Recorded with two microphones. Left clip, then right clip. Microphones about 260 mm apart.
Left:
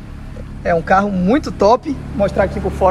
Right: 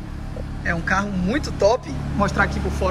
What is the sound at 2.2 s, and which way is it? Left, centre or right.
Speech, centre.